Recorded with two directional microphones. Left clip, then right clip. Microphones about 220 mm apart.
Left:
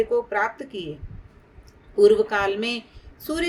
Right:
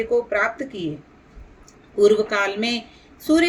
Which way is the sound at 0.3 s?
30° left (ahead or behind).